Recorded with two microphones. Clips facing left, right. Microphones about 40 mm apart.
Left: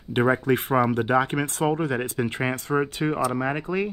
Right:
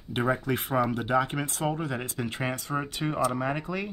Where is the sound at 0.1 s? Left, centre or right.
Left.